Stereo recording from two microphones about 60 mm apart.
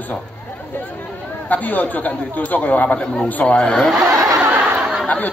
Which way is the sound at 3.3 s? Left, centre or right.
Left.